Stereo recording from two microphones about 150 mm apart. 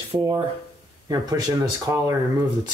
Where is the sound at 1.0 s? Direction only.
25° right (ahead or behind).